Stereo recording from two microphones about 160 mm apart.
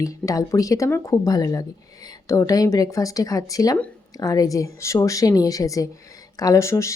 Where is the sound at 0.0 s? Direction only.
20° left (ahead or behind).